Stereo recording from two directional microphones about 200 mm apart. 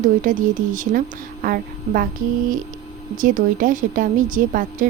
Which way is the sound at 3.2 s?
40° right (ahead or behind).